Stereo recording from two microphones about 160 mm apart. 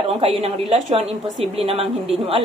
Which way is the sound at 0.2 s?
40° right (ahead or behind).